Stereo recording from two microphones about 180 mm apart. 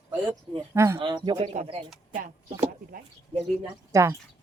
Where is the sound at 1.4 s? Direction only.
40° right (ahead or behind).